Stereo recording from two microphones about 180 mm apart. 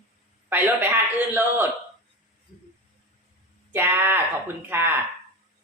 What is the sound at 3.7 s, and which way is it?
Speech, 10° right (ahead or behind).